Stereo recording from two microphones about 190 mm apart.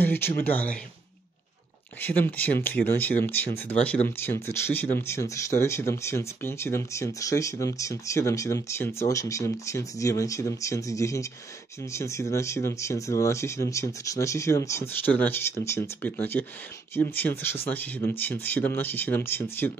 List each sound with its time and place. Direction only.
0.0 s speech: 10° left (ahead or behind)
2.0 s speech: 10° left (ahead or behind)